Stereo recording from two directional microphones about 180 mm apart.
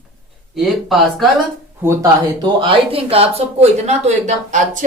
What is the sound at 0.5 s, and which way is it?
Speech, centre (ahead or behind).